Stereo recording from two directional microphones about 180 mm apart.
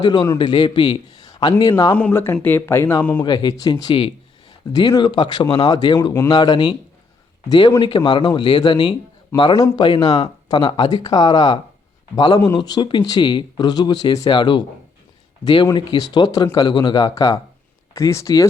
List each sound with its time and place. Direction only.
0.0 s speech: 25° left (ahead or behind)
2.0 s speech: 10° left (ahead or behind)
3.2 s speech: 25° left (ahead or behind)